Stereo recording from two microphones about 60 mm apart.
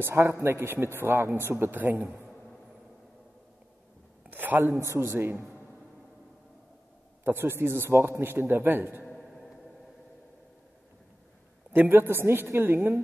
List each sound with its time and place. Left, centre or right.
0.0 s a man's voice: right
4.3 s a sound: right
4.8 s a man's voice: right
5.1 s a man's voice: right
7.2 s a man's voice: right
9.2 s a sound: centre
11.7 s a man's voice: right